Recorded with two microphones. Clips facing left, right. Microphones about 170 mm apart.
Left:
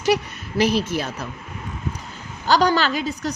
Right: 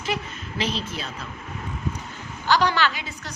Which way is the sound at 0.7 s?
80° left.